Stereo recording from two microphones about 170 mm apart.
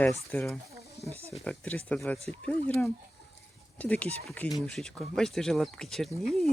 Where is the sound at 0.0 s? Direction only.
10° left (ahead or behind).